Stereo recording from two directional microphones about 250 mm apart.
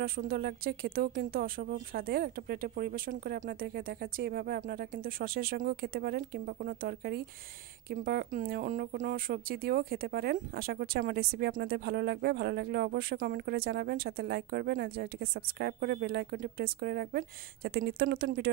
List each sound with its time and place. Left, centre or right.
0.0 s speech: right